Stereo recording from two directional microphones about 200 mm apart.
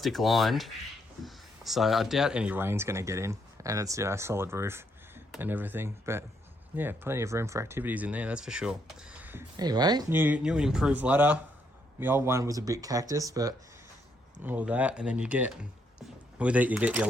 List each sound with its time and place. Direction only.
0.0 s speech: centre (ahead or behind)
9.6 s speech: 20° right (ahead or behind)